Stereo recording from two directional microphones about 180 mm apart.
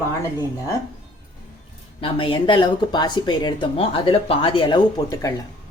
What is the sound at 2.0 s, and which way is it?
Speech, 30° left (ahead or behind).